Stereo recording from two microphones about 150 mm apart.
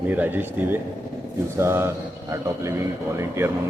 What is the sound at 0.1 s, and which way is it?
A man's voice, 10° right (ahead or behind).